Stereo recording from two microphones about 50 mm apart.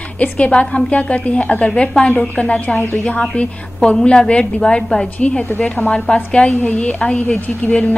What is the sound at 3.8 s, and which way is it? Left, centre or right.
A woman's voice, centre.